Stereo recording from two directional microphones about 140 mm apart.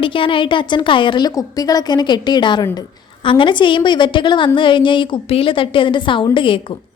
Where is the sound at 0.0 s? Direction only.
40° left (ahead or behind).